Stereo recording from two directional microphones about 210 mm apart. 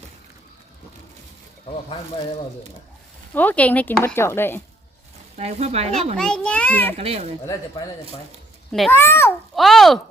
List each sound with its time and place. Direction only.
3.3 s speech: 10° left (ahead or behind)
5.4 s speech: 30° right (ahead or behind)
6.1 s a child's voice: 5° left (ahead or behind)
6.9 s speech: 30° right (ahead or behind)
8.9 s speech: 10° left (ahead or behind)
9.6 s a sound: centre (ahead or behind)